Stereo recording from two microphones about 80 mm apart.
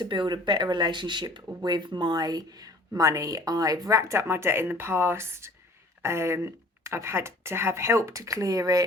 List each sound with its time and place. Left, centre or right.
0.0 s speech: right